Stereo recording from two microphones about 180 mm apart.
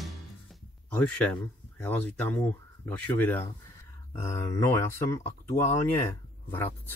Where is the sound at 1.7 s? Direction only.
5° left (ahead or behind).